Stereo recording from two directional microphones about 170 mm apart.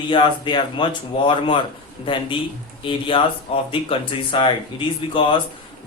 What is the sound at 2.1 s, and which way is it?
Speech, 30° left (ahead or behind).